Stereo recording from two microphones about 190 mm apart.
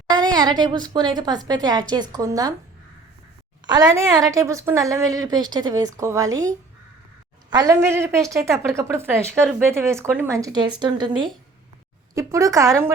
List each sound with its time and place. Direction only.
0.1 s a woman's voice: 20° right (ahead or behind)
3.7 s a woman's voice: 20° right (ahead or behind)
7.5 s speech: 15° right (ahead or behind)